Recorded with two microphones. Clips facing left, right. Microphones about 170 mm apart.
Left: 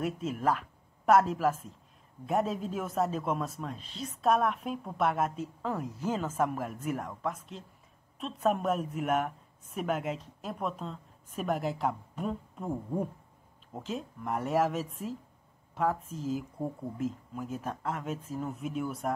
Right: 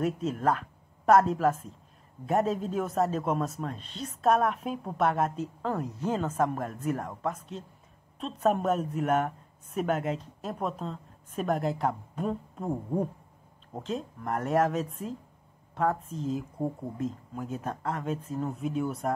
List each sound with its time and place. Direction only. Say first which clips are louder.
0.0 s a woman's voice: right 3 dB; centre (ahead or behind)
12.6 s speech: right 3 dB; 15° right (ahead or behind)
13.8 s a woman's voice: right 2 dB; centre (ahead or behind)